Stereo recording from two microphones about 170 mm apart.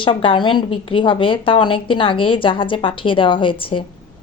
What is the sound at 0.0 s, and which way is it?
A woman's voice, 30° left (ahead or behind).